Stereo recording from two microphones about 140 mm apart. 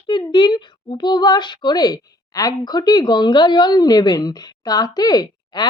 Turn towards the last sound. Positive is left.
turn(degrees=30)  # may be behind; listen again after turning